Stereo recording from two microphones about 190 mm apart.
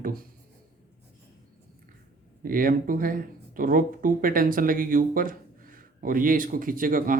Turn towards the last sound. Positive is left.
turn(degrees=-45)  # may be behind; listen again after turning